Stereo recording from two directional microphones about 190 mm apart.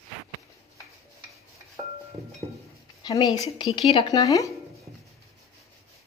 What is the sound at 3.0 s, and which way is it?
A woman's voice, 20° left (ahead or behind).